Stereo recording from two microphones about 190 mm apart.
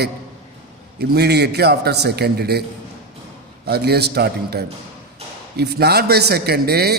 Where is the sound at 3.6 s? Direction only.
60° right (ahead or behind).